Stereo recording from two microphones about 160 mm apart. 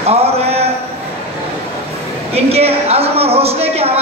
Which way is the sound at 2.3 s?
40° right (ahead or behind).